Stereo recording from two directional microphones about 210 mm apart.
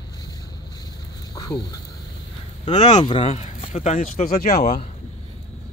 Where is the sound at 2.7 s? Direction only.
35° left (ahead or behind).